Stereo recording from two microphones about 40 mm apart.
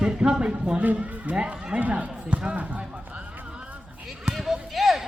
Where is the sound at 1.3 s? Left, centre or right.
Right.